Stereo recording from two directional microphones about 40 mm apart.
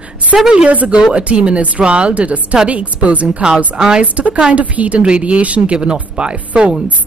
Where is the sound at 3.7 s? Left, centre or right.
Centre.